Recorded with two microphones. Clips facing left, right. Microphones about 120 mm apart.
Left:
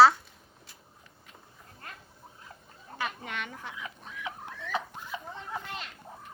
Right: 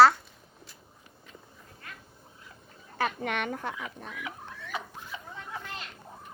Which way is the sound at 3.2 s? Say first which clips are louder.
Right 7 dB; 55° right (ahead or behind).